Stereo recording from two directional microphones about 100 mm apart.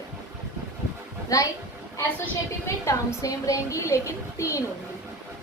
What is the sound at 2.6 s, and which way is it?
A woman's voice, 30° left (ahead or behind).